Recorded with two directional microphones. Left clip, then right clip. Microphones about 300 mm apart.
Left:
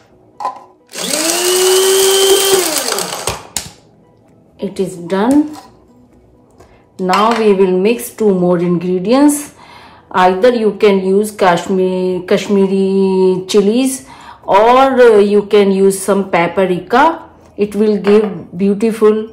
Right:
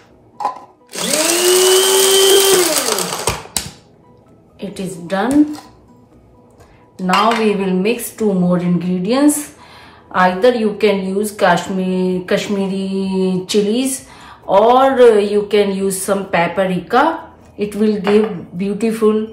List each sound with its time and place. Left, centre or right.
0.9 s drill: centre
4.6 s a woman's voice: left
7.4 s speech: left